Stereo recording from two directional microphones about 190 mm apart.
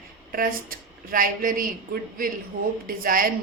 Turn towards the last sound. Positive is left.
turn(degrees=-45)  # may be behind; listen again after turning